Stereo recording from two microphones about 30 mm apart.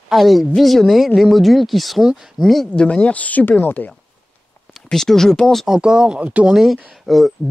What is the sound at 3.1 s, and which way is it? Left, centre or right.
Speech, left.